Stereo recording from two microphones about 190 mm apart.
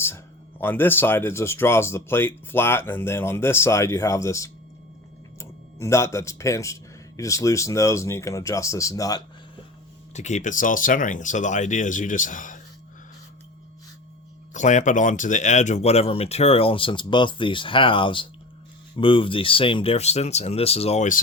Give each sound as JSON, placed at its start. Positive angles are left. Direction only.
{"t": 0.6, "sound": "speech", "side_deg": 10}
{"t": 10.2, "sound": "speech", "side_deg": 40}
{"t": 14.5, "sound": "speech", "side_deg": 40}